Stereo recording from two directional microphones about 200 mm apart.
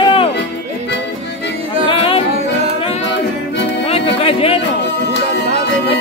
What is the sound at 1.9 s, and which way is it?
Singing, 25° left (ahead or behind).